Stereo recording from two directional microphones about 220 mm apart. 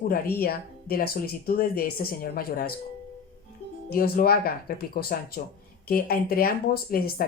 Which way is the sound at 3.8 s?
45° left (ahead or behind).